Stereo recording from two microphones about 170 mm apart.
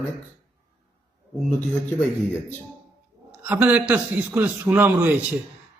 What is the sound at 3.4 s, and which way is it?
A man's voice, 10° right (ahead or behind).